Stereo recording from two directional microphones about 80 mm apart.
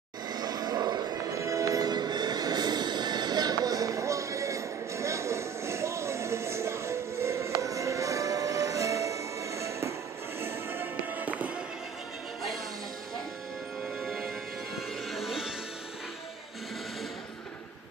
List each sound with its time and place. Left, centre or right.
0.3 s music: right
1.4 s music: right
10.4 s fireworks: right
14.0 s music: centre